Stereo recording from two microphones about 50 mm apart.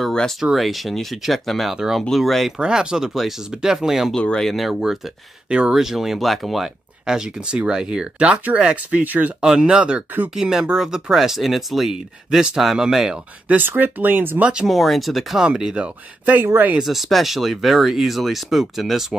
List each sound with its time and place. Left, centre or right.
0.4 s speech: centre
2.5 s speech: centre
4.4 s speech: centre
7.1 s speech: centre; by 9.3 s right
9.4 s speech: centre
13.6 s speech: right
14.4 s speech: centre
14.7 s speech: centre
15.4 s speech: centre
16.8 s speech: centre